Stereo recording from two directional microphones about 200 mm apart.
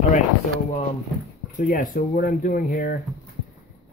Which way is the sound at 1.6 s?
45° left (ahead or behind).